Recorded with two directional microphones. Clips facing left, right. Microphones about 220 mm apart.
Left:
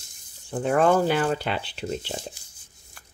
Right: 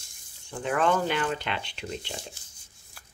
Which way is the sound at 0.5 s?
40° left (ahead or behind).